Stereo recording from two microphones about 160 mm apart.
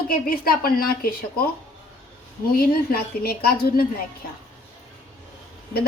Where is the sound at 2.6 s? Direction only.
70° left (ahead or behind).